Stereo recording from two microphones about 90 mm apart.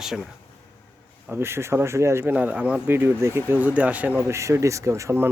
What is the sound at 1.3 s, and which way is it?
Speech, 25° right (ahead or behind).